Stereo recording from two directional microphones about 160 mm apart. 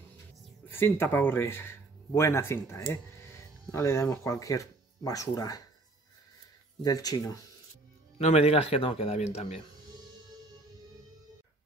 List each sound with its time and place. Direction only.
0.7 s speech: 15° left (ahead or behind)
6.8 s speech: 25° left (ahead or behind)
8.2 s a man's voice: 45° left (ahead or behind)